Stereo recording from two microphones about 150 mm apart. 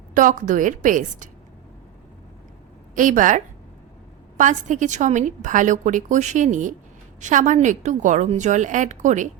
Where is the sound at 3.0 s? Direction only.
60° right (ahead or behind).